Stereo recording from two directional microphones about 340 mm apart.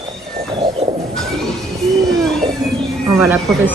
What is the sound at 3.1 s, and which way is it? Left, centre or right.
Speech, centre.